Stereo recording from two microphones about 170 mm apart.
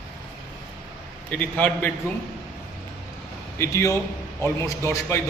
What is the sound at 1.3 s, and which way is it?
Speech, 10° left (ahead or behind).